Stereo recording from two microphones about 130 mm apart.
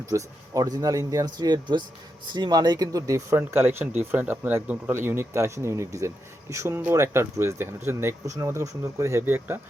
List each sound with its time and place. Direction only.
0.1 s speech: 25° right (ahead or behind)